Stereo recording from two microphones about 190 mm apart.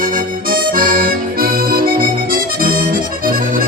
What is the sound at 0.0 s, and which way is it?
Accordion, 45° right (ahead or behind).